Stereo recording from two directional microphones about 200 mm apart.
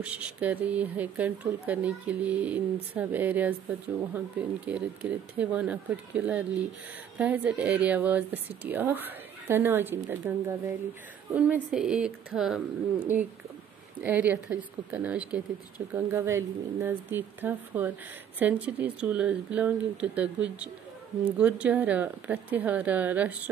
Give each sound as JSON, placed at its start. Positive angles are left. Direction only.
{"t": 0.0, "sound": "speech", "side_deg": -5}